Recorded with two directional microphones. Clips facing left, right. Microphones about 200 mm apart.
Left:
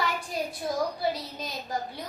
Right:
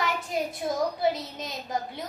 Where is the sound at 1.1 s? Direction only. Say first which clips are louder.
Right 2 dB; 20° right (ahead or behind).